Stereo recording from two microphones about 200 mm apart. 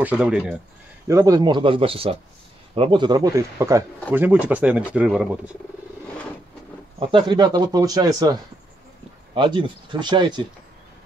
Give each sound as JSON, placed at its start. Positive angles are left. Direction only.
{"t": 0.0, "sound": "speech", "side_deg": -5}
{"t": 1.0, "sound": "speech", "side_deg": -15}
{"t": 7.0, "sound": "speech", "side_deg": -25}